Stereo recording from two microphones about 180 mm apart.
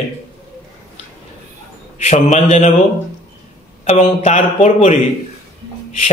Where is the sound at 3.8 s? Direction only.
40° left (ahead or behind).